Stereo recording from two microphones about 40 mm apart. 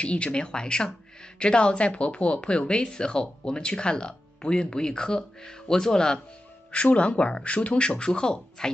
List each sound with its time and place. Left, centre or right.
0.0 s speech: left
6.7 s speech: left